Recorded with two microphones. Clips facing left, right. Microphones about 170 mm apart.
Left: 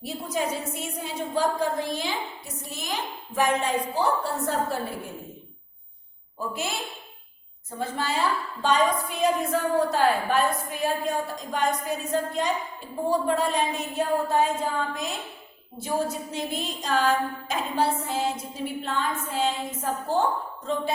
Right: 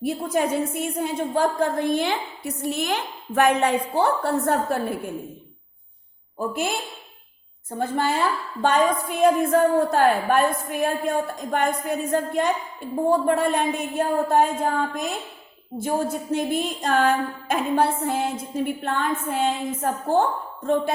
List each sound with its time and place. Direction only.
0.0 s a woman's voice: 55° right (ahead or behind)
6.5 s a woman's voice: 50° right (ahead or behind)
7.8 s a woman's voice: 55° right (ahead or behind)